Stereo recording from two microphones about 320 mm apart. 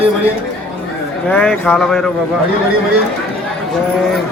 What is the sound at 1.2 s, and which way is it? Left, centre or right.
Speech, centre.